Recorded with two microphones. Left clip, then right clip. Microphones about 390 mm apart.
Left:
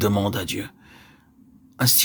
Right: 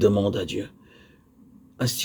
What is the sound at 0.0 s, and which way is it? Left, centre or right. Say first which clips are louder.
Speech: right 2 dB; left.